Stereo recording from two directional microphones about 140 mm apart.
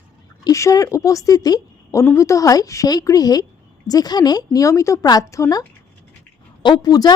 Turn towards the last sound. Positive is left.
turn(degrees=30)  # may be behind; listen again after turning